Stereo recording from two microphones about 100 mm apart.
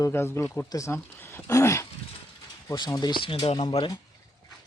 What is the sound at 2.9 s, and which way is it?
Speech, 45° left (ahead or behind).